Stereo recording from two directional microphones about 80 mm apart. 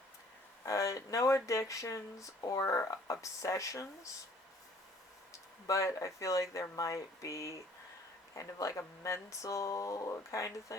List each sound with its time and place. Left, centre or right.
0.6 s speech: left
5.3 s speech: left